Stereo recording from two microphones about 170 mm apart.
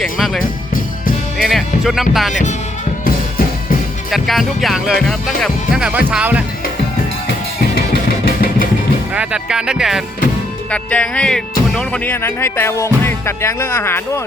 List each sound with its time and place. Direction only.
0.0 s speech: 5° left (ahead or behind)
1.4 s music: centre (ahead or behind)
2.3 s speech: 45° left (ahead or behind)
4.1 s speech: centre (ahead or behind)
8.2 s vehicle: 60° left (ahead or behind)
9.1 s speech: 5° right (ahead or behind)
10.7 s speech: 5° left (ahead or behind)